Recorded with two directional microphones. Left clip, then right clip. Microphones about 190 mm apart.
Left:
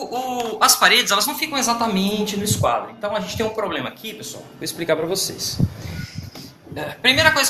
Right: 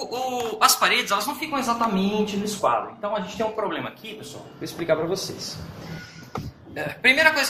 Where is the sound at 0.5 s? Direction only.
15° left (ahead or behind).